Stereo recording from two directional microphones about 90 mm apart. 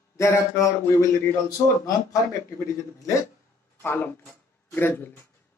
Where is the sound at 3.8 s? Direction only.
20° left (ahead or behind).